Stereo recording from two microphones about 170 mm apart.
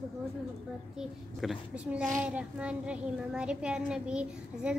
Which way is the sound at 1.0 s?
Centre (ahead or behind).